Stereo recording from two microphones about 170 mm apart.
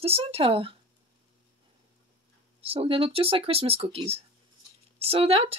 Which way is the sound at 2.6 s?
35° right (ahead or behind).